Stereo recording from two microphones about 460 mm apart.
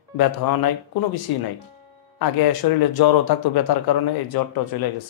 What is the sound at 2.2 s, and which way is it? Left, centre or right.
Speech, left.